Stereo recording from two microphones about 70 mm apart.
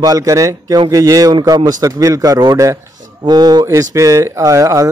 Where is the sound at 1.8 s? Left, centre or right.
Right.